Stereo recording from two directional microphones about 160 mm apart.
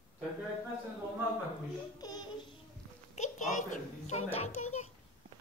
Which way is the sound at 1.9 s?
25° left (ahead or behind).